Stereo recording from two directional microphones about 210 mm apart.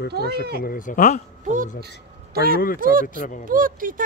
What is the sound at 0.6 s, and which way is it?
Speech, 40° left (ahead or behind).